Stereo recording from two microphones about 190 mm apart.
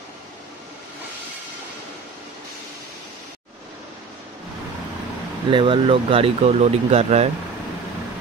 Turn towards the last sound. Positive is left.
turn(degrees=-35)  # may be behind; listen again after turning